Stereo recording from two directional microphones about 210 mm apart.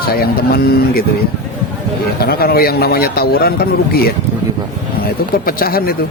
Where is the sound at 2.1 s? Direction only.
45° left (ahead or behind).